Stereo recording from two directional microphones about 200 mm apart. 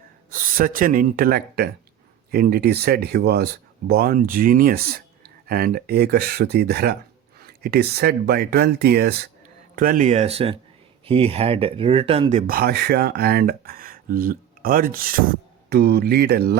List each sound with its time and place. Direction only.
0.3 s speech: 45° right (ahead or behind)